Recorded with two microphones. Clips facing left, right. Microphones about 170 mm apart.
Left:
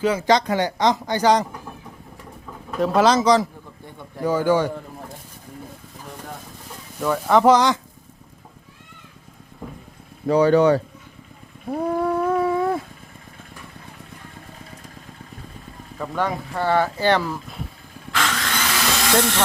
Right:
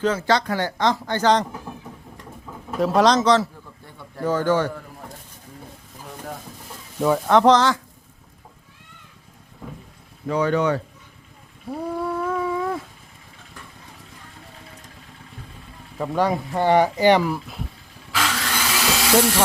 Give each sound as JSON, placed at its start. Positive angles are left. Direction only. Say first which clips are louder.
{"t": 0.0, "sound": "speech", "louder": "left 2 dB", "side_deg": 15}
{"t": 1.7, "sound": "vehicle", "louder": "right 2 dB", "side_deg": -5}
{"t": 2.7, "sound": "speech", "louder": "even", "side_deg": 0}
{"t": 7.3, "sound": "speech", "louder": "left 1 dB", "side_deg": 5}
{"t": 10.2, "sound": "speech", "louder": "left 5 dB", "side_deg": 35}
{"t": 11.7, "sound": "dog", "louder": "left 5 dB", "side_deg": 50}
{"t": 16.0, "sound": "speech", "louder": "right 3 dB", "side_deg": -15}
{"t": 18.1, "sound": "a sound", "louder": "even", "side_deg": -5}